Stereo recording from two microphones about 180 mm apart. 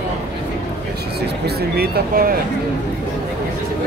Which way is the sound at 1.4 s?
60° right (ahead or behind).